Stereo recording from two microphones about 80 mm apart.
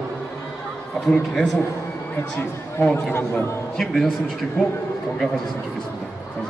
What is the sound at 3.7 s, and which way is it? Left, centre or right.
Speech, centre.